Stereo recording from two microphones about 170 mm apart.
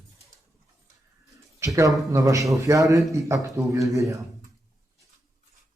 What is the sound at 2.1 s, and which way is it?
Speech, 20° right (ahead or behind).